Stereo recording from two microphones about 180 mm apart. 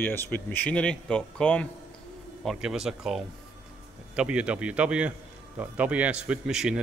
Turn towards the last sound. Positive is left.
turn(degrees=-5)  # may be behind; listen again after turning